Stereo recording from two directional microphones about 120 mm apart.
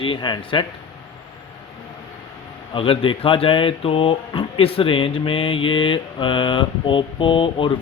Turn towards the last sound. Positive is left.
turn(degrees=45)  # may be behind; listen again after turning